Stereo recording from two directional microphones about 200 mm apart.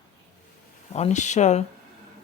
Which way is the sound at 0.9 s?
35° left (ahead or behind).